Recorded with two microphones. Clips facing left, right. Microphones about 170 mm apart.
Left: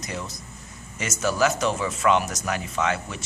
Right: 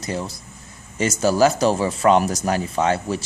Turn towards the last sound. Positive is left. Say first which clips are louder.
# right 6 dB
turn(degrees=-35)  # may be behind; listen again after turning